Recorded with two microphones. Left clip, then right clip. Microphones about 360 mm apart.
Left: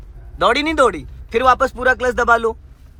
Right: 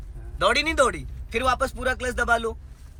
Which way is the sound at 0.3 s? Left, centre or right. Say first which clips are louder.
Left 6 dB; centre.